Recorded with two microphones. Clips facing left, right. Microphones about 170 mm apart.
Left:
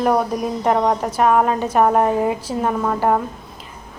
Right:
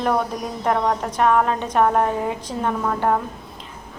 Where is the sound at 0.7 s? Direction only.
20° left (ahead or behind).